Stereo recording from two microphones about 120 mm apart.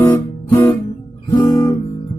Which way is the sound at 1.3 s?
30° left (ahead or behind).